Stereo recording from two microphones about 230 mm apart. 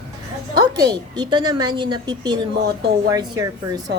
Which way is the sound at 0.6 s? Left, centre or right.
Centre.